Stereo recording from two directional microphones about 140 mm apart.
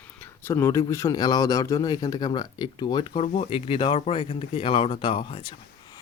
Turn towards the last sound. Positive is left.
turn(degrees=40)  # may be behind; listen again after turning